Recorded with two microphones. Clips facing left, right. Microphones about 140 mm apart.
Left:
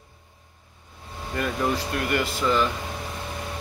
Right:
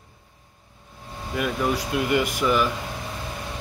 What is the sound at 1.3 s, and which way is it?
Speech, 5° right (ahead or behind).